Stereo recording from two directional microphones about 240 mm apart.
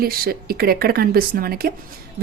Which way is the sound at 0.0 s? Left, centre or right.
Right.